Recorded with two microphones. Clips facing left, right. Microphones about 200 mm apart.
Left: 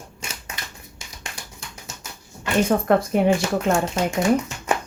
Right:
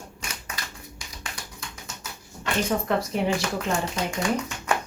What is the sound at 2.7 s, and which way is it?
Speech, 55° left (ahead or behind).